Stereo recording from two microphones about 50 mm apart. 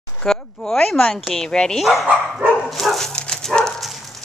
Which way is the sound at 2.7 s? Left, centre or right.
Centre.